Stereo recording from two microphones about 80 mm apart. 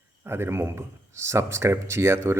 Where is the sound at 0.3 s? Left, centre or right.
Right.